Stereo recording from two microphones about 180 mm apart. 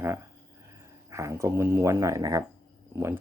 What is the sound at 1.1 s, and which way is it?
Speech, 15° right (ahead or behind).